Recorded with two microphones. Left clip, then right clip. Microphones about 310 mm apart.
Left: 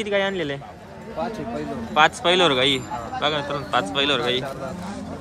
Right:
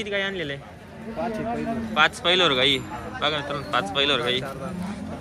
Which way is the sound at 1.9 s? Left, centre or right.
Centre.